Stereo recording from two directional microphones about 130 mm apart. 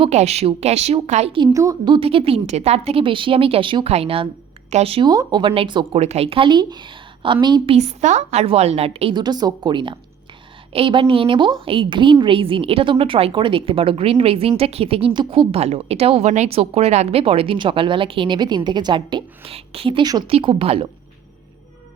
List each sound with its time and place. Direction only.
0.1 s a woman's voice: 60° right (ahead or behind)
1.5 s a woman's voice: 30° right (ahead or behind); by 5.0 s 50° right (ahead or behind)
5.0 s a woman's voice: 35° right (ahead or behind)
6.0 s a woman's voice: 55° right (ahead or behind); by 7.8 s 35° right (ahead or behind)
7.8 s a woman's voice: 60° right (ahead or behind)
9.1 s a woman's voice: 35° right (ahead or behind)